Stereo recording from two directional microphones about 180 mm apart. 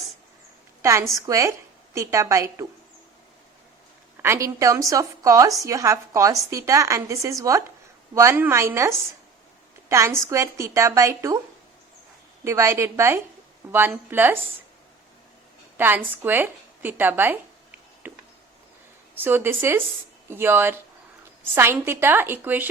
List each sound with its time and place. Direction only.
0.8 s a woman's voice: 15° right (ahead or behind)
4.2 s a woman's voice: 15° right (ahead or behind)
12.5 s a woman's voice: 15° right (ahead or behind)
15.8 s a woman's voice: 10° right (ahead or behind)
19.1 s a woman's voice: 10° right (ahead or behind)